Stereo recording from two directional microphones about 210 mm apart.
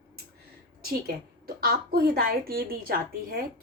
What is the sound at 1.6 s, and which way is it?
A woman's voice, 45° right (ahead or behind).